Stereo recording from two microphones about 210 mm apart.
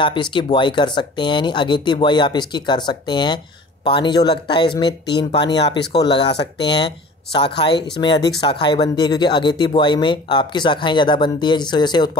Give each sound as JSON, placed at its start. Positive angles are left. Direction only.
{"t": 0.0, "sound": "speech", "side_deg": 20}